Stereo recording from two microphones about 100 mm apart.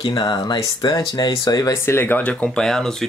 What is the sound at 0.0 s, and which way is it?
Speech, 50° left (ahead or behind).